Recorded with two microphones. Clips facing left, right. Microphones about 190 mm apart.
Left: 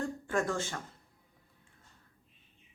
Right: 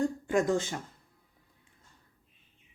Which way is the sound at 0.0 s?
15° right (ahead or behind).